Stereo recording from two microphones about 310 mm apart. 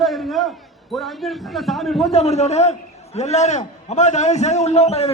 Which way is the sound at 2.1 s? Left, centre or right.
Left.